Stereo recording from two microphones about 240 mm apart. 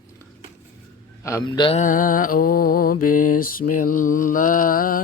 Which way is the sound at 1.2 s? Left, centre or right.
Centre.